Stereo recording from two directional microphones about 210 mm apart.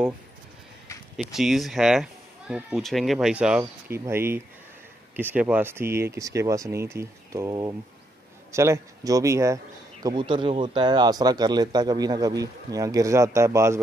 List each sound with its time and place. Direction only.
1.1 s speech: centre (ahead or behind)